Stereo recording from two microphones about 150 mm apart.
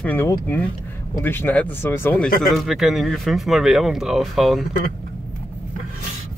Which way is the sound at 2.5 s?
Centre (ahead or behind).